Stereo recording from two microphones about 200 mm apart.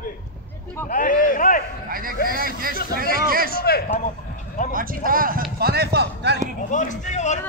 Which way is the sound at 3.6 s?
50° left (ahead or behind).